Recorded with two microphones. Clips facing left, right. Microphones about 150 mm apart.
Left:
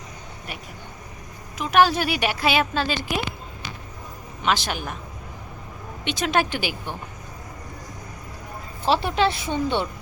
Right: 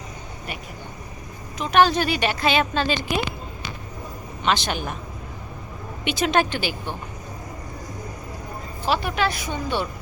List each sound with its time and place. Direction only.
1.5 s a woman's voice: 5° left (ahead or behind)
4.4 s a woman's voice: 5° left (ahead or behind)
6.1 s speech: centre (ahead or behind)
8.9 s speech: 30° left (ahead or behind)